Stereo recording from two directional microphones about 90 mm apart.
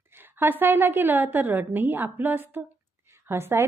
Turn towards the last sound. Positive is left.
turn(degrees=-25)  # may be behind; listen again after turning